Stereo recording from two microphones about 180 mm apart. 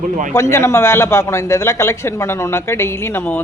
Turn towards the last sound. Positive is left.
turn(degrees=10)  # may be behind; listen again after turning